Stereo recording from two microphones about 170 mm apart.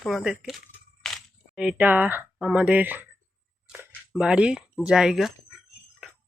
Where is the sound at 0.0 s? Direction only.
Centre (ahead or behind).